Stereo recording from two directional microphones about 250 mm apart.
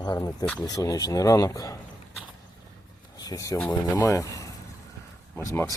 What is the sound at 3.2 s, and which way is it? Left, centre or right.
Speech, centre.